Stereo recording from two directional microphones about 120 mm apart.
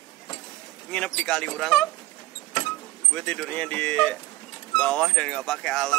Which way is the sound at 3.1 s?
5° left (ahead or behind).